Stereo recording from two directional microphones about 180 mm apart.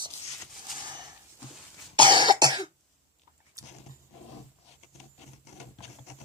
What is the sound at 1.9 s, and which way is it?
Cough, 25° right (ahead or behind).